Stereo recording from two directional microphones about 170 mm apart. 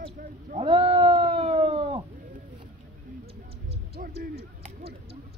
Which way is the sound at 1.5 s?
35° right (ahead or behind).